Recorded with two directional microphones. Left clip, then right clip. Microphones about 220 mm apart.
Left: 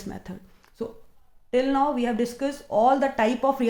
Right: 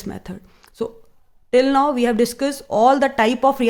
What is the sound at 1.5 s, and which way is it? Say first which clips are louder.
Speech: right 7 dB; 40° right (ahead or behind).